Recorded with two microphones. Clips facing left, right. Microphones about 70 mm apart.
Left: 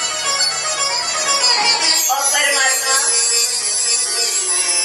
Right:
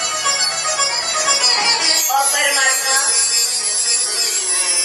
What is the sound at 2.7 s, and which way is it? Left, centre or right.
Music, left.